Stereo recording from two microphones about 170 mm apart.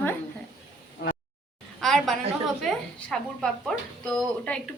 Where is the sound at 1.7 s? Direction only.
Centre (ahead or behind).